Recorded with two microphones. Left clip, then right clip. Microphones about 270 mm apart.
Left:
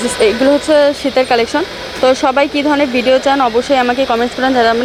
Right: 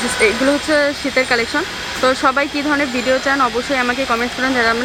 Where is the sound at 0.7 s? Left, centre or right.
Centre.